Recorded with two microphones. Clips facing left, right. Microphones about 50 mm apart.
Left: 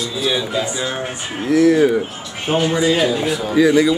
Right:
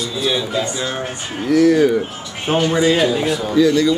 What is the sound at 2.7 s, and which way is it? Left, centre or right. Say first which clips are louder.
Speech: right 1 dB; centre.